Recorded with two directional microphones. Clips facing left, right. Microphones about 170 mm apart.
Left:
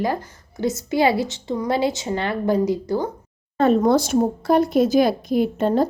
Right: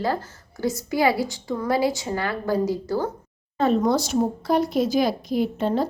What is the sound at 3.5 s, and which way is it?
Speech, 55° left (ahead or behind).